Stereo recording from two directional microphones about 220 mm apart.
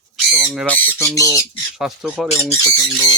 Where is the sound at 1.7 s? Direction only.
Centre (ahead or behind).